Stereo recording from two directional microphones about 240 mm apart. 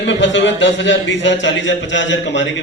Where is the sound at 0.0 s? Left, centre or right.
Left.